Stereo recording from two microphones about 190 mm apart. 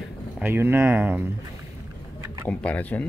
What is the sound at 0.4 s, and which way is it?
Speech, 10° right (ahead or behind).